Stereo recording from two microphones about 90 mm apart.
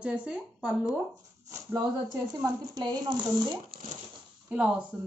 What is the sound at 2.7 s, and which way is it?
Speech, 55° right (ahead or behind).